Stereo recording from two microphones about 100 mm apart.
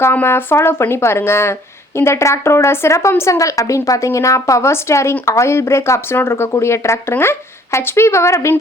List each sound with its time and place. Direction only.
0.0 s speech: 25° left (ahead or behind)